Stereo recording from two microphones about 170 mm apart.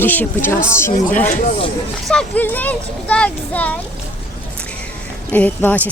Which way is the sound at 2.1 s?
5° left (ahead or behind).